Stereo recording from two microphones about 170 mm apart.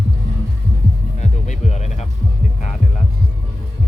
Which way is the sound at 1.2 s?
45° left (ahead or behind).